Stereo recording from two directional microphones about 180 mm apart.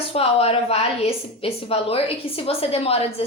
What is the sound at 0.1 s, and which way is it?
A woman's voice, 35° left (ahead or behind).